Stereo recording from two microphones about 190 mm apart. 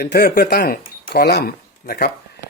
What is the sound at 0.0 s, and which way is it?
Speech, 55° left (ahead or behind).